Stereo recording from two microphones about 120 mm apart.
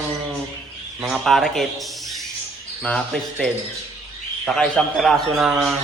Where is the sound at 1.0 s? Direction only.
5° right (ahead or behind).